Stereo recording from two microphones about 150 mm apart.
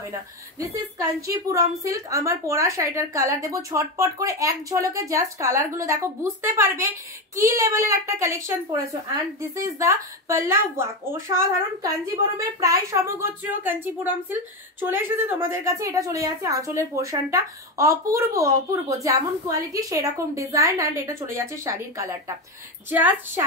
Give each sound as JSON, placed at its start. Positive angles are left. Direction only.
{"t": 0.6, "sound": "a woman's voice", "side_deg": -20}